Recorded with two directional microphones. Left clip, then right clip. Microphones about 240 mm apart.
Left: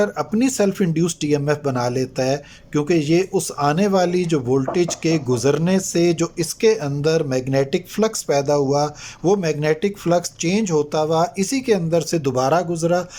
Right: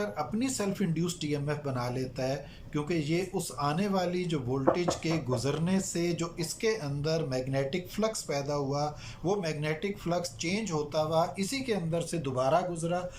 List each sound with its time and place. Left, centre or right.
0.0 s speech: left